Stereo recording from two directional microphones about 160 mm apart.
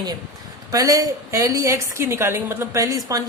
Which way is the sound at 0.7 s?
20° right (ahead or behind).